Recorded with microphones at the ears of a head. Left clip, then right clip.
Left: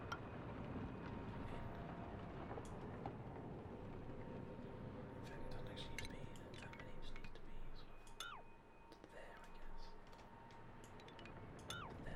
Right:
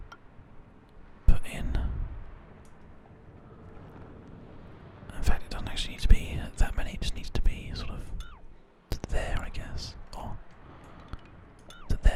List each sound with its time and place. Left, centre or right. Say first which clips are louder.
1.2 s whispering: right 11 dB; right
5.0 s whispering: right 15 dB; right